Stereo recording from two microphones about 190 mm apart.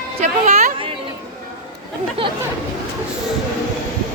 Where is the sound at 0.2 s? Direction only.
35° right (ahead or behind).